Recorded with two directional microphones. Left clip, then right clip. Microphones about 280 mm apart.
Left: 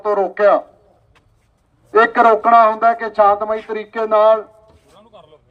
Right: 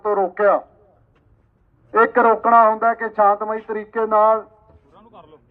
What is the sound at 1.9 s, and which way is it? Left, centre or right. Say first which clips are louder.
A man's voice: left 3 dB; centre.